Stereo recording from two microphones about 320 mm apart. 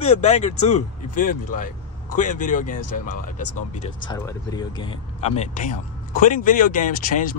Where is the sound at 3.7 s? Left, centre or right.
Centre.